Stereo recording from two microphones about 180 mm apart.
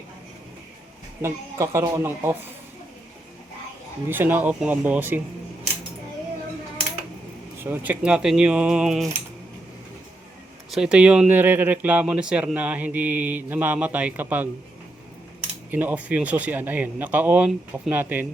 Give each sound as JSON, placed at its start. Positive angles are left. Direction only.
{"t": 1.2, "sound": "speech", "side_deg": -15}
{"t": 4.1, "sound": "speech", "side_deg": -10}
{"t": 7.6, "sound": "speech", "side_deg": -10}
{"t": 10.7, "sound": "speech", "side_deg": -5}
{"t": 15.7, "sound": "speech", "side_deg": -10}